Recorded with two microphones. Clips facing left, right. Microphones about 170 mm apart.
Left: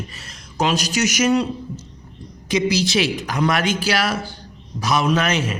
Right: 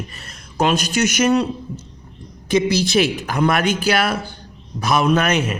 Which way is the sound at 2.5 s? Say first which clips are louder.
Right 2 dB; 55° right (ahead or behind).